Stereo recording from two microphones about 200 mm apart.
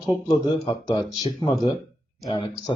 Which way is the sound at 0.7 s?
20° left (ahead or behind).